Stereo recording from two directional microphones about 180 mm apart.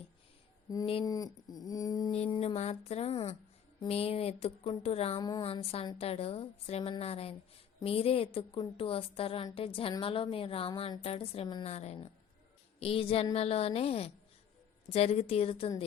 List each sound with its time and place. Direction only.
0.9 s speech: 25° left (ahead or behind)
2.1 s a woman's voice: 35° left (ahead or behind)